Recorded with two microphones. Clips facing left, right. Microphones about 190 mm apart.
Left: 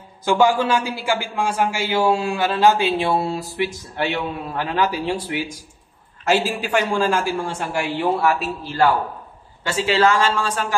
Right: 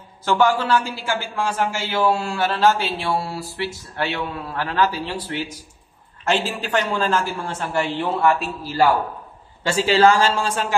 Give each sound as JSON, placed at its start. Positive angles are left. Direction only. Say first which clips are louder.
{"t": 0.2, "sound": "a man's voice", "louder": "left 2 dB", "side_deg": 15}
{"t": 9.6, "sound": "speech", "louder": "right 2 dB", "side_deg": -30}